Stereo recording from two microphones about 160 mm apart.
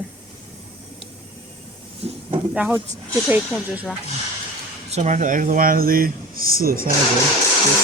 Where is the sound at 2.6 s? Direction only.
10° right (ahead or behind).